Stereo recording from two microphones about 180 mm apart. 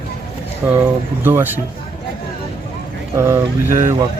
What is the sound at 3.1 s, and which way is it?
Speech, 15° right (ahead or behind).